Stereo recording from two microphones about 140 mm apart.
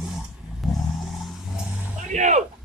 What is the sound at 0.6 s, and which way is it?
Vehicle, centre (ahead or behind).